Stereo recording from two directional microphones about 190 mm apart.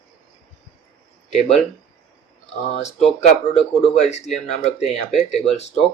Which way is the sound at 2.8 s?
35° left (ahead or behind).